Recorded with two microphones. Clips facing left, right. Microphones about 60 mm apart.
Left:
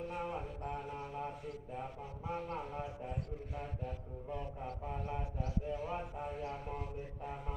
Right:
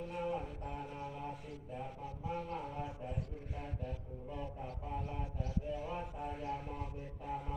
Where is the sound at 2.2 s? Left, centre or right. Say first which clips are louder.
Left 1 dB; left.